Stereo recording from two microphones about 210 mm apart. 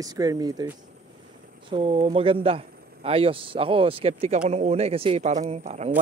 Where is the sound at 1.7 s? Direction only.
30° right (ahead or behind).